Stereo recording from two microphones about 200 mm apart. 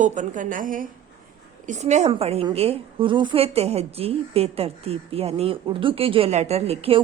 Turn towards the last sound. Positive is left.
turn(degrees=-30)  # may be behind; listen again after turning